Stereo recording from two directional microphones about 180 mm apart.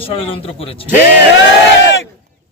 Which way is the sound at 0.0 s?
30° left (ahead or behind).